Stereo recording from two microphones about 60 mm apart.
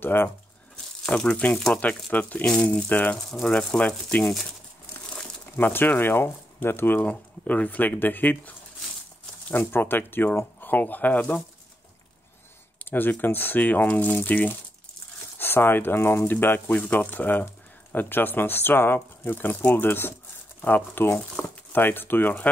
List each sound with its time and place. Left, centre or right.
0.0 s speech: left
1.1 s speech: centre
3.2 s speech: centre
3.5 s speech: left
4.2 s speech: centre
5.6 s speech: left
7.1 s speech: left
12.8 s a sound: left
13.2 s speech: left